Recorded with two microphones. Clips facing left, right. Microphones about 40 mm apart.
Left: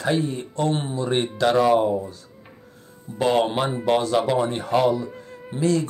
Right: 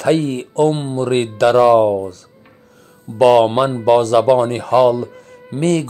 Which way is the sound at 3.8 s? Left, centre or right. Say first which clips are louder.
Right 9 dB; right.